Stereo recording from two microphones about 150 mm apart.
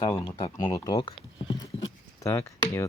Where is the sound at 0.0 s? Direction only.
30° left (ahead or behind).